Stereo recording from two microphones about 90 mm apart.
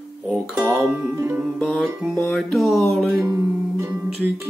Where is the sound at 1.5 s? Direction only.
Centre (ahead or behind).